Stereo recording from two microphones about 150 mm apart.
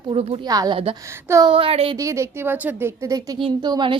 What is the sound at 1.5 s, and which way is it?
Speech, 40° right (ahead or behind).